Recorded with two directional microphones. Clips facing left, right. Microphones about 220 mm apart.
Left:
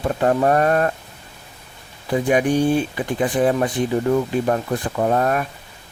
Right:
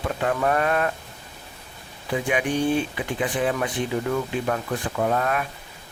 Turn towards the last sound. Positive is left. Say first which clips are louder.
# left 4 dB
turn(degrees=40)  # may be behind; listen again after turning